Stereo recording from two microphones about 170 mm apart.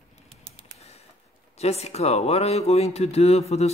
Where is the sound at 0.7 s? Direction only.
40° left (ahead or behind).